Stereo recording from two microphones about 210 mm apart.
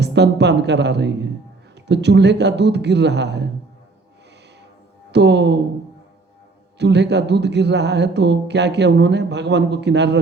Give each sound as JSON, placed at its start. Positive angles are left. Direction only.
{"t": 0.0, "sound": "speech", "side_deg": -55}
{"t": 5.1, "sound": "speech", "side_deg": -55}
{"t": 6.7, "sound": "speech", "side_deg": -55}